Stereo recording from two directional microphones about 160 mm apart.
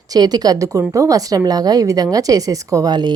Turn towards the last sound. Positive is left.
turn(degrees=-25)  # may be behind; listen again after turning